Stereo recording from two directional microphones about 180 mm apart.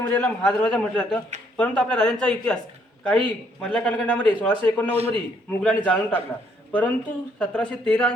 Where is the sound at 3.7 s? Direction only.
5° left (ahead or behind).